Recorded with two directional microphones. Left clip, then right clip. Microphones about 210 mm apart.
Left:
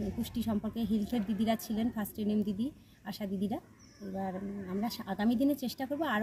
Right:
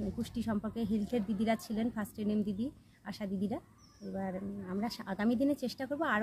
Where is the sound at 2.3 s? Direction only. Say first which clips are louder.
Left 2 dB; 25° right (ahead or behind).